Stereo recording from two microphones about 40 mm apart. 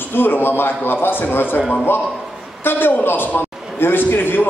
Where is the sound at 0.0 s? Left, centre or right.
Left.